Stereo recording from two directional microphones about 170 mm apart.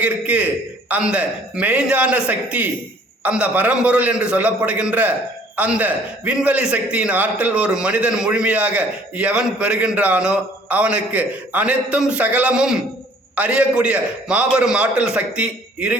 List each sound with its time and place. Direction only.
0.0 s a man's voice: 10° right (ahead or behind)